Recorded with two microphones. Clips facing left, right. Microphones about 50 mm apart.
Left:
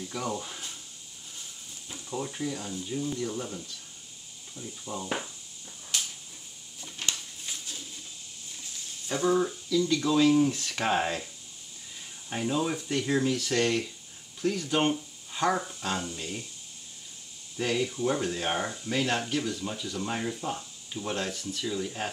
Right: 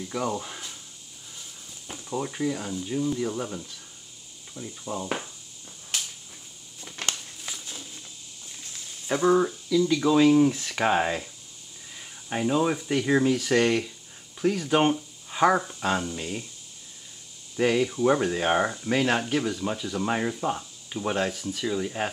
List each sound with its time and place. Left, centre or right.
0.1 s speech: centre
2.0 s speech: centre
6.8 s a sound: right
9.0 s speech: right
9.7 s speech: centre
12.3 s speech: centre
17.6 s speech: right
18.0 s speech: right